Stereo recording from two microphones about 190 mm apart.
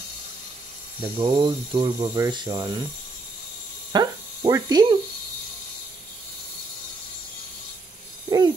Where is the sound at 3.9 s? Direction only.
20° right (ahead or behind).